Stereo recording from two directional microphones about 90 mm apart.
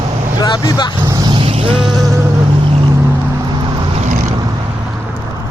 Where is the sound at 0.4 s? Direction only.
50° left (ahead or behind).